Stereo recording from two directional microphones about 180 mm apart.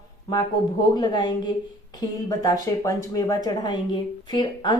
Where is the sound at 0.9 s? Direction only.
25° left (ahead or behind).